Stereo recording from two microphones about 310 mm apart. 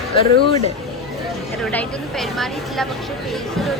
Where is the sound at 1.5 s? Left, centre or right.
Centre.